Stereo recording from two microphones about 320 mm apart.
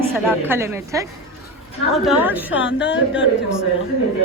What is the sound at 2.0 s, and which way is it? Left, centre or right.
Speech, centre.